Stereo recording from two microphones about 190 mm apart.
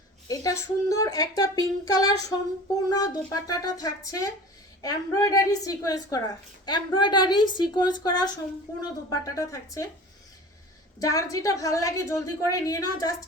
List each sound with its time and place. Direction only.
0.3 s a woman's voice: 20° left (ahead or behind)
11.0 s a woman's voice: 15° left (ahead or behind)